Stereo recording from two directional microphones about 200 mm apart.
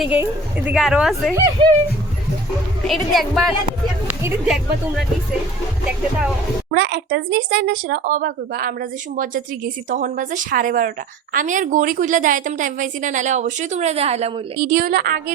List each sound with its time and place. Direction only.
0.0 s a woman's voice: 5° right (ahead or behind)
2.8 s a woman's voice: centre (ahead or behind)
6.7 s speech: 60° right (ahead or behind); by 14.4 s 30° right (ahead or behind)
14.6 s a woman's voice: 45° right (ahead or behind)